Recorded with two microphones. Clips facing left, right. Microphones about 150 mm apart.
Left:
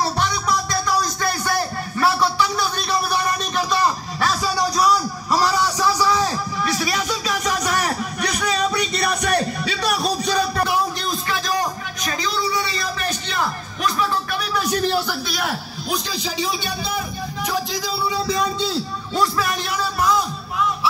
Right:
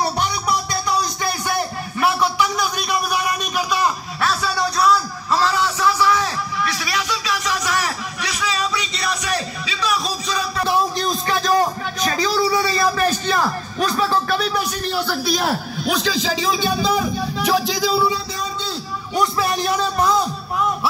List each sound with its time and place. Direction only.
2.0 s a sound: 15° right (ahead or behind); by 5.6 s 10° left (ahead or behind)
5.8 s music: 40° left (ahead or behind); by 10.6 s 55° left (ahead or behind)
11.6 s a sound: 35° right (ahead or behind)
15.9 s speech: 90° right
19.1 s music: 25° right (ahead or behind)
20.5 s music: 45° right (ahead or behind)